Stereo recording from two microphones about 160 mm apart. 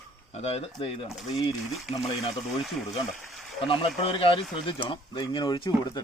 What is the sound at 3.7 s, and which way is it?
Speech, 35° left (ahead or behind).